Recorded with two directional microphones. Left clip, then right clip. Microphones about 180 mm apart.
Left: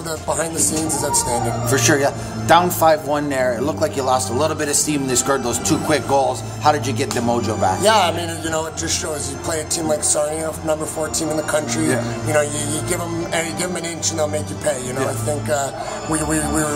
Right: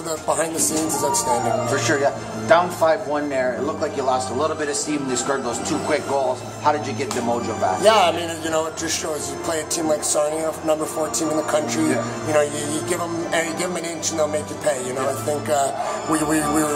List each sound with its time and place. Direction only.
1.0 s speech: centre (ahead or behind)
1.7 s speech: 65° left (ahead or behind)
7.8 s speech: centre (ahead or behind)